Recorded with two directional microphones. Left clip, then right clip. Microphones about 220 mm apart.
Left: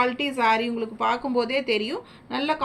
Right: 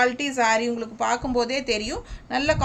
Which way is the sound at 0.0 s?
30° right (ahead or behind).